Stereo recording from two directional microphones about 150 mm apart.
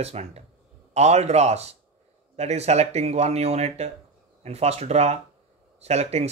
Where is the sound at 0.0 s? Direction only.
45° right (ahead or behind).